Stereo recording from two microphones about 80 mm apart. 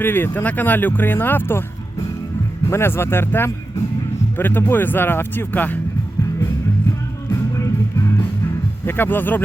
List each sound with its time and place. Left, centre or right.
0.0 s speech: left
2.6 s speech: left
7.3 s music: left
8.9 s speech: left